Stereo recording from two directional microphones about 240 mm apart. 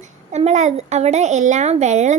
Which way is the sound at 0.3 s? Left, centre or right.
Right.